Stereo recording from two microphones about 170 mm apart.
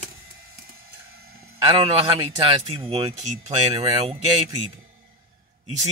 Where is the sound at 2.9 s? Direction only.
35° right (ahead or behind).